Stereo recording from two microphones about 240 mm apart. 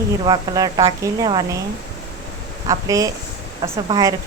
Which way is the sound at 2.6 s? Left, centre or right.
Centre.